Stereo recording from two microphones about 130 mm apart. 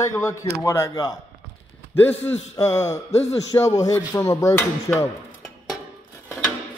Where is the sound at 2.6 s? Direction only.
25° left (ahead or behind).